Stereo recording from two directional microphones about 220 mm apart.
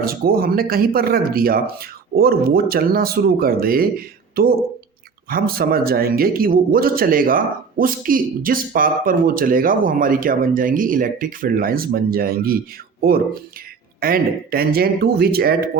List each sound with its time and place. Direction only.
0.0 s a man's voice: 40° right (ahead or behind)